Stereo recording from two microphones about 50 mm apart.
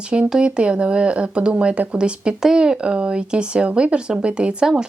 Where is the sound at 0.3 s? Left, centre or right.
Centre.